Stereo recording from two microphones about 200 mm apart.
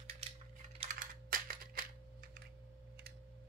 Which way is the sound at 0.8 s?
30° right (ahead or behind).